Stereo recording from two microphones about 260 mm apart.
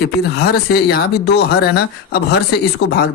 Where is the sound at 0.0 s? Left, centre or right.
Left.